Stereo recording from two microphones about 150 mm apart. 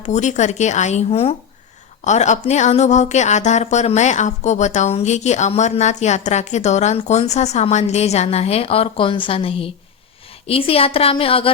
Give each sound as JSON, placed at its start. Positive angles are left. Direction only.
{"t": 0.0, "sound": "a woman's voice", "side_deg": 50}
{"t": 2.0, "sound": "a woman's voice", "side_deg": 50}